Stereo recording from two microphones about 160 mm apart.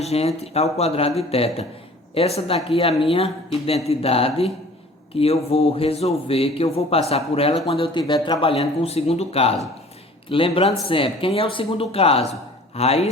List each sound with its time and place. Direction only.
0.0 s speech: 40° left (ahead or behind)